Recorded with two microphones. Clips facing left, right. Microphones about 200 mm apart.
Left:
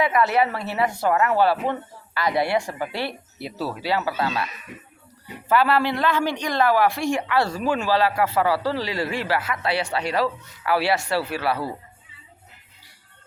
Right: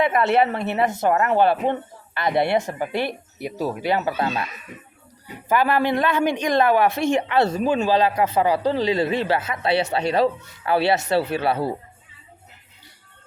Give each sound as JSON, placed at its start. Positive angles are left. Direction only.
{"t": 0.0, "sound": "speech", "side_deg": -25}
{"t": 5.5, "sound": "speech", "side_deg": -15}